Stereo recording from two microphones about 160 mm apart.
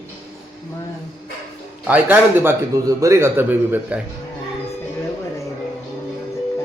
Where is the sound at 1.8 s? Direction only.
10° right (ahead or behind).